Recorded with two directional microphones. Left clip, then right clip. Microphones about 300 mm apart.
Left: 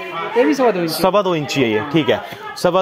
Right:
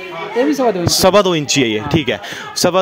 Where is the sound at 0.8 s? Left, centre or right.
Right.